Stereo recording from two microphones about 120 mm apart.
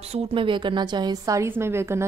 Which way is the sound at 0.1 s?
50° right (ahead or behind).